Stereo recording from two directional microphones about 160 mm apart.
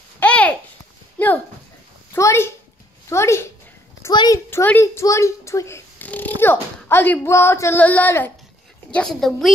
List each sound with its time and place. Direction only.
0.2 s a sound: 10° left (ahead or behind)
1.2 s speech: 10° left (ahead or behind)
4.1 s a child's voice: 30° left (ahead or behind)
4.5 s a child's voice: 15° left (ahead or behind)